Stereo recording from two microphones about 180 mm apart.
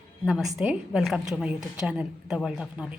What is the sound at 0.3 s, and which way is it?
A woman's voice, centre (ahead or behind).